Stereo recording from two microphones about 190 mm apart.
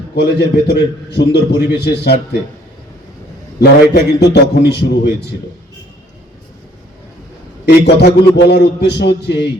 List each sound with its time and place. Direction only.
0.2 s a man's voice: 65° left (ahead or behind)
3.6 s a man's voice: 55° left (ahead or behind)
7.6 s a man's voice: 65° left (ahead or behind)